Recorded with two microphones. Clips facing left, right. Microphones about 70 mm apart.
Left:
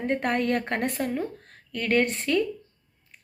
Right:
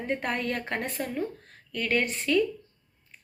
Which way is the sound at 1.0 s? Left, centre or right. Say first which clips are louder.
Left 3 dB; left.